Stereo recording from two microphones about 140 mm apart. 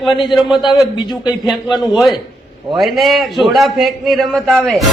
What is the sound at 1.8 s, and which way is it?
Speech, centre (ahead or behind).